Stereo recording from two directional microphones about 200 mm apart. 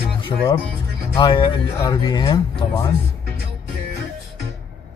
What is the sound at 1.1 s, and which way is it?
Speech, 25° left (ahead or behind).